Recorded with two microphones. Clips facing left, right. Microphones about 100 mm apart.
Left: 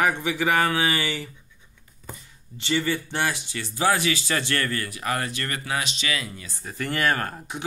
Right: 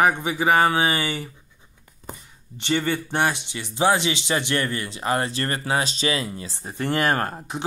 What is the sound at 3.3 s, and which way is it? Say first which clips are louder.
Speech: right 2 dB; 20° right (ahead or behind).